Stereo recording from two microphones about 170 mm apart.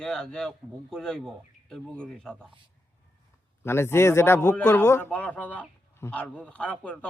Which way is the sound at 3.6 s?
15° left (ahead or behind).